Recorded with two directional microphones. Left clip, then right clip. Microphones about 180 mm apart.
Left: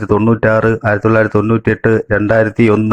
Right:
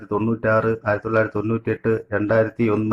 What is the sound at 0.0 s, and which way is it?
Speech, 45° left (ahead or behind).